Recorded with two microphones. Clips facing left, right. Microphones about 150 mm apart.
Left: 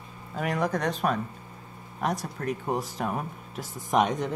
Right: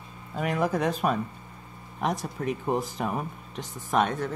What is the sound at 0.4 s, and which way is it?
Speech, centre (ahead or behind).